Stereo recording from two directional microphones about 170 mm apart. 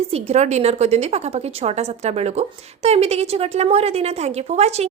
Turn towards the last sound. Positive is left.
turn(degrees=-40)  # may be behind; listen again after turning